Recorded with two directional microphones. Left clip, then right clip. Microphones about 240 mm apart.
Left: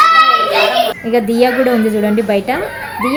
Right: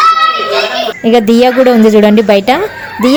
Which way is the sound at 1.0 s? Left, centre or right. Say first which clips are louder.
Right 11 dB; right.